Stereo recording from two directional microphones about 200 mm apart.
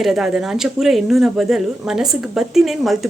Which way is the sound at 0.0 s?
Centre (ahead or behind).